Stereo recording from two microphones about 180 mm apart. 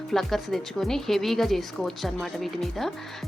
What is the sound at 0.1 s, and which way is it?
Speech, centre (ahead or behind).